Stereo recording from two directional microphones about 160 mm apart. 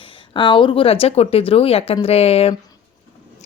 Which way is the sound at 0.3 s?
30° left (ahead or behind).